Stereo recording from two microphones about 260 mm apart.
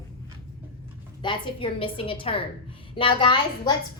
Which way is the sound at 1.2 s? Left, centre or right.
Centre.